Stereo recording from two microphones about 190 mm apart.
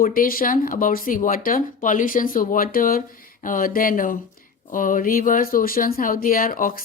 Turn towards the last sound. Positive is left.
turn(degrees=45)  # may be behind; listen again after turning